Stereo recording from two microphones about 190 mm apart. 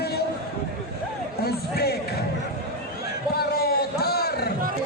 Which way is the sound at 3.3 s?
55° left (ahead or behind).